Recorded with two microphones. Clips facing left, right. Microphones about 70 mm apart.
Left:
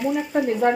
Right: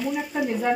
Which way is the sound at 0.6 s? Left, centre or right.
Left.